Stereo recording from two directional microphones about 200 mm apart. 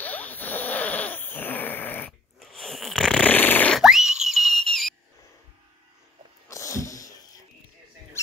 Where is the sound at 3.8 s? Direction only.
5° right (ahead or behind).